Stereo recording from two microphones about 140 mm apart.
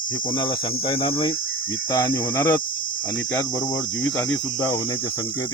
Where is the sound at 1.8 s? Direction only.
30° left (ahead or behind).